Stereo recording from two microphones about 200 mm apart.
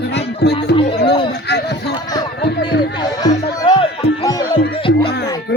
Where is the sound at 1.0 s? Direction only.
25° left (ahead or behind).